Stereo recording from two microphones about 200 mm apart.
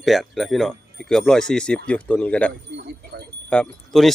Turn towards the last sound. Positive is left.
turn(degrees=5)  # may be behind; listen again after turning